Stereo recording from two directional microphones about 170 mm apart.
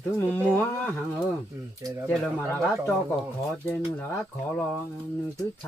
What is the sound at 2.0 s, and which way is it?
Speech, centre (ahead or behind).